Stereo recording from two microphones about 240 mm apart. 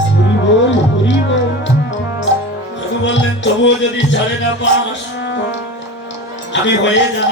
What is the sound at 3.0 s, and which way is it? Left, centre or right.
Speech, left.